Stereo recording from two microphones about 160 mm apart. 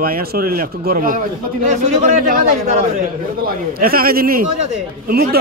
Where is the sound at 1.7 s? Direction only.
50° right (ahead or behind).